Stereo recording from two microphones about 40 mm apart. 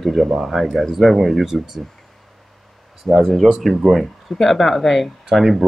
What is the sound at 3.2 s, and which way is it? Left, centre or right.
Speech, centre.